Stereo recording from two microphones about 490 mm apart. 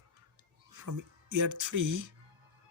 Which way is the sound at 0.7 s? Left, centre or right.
Right.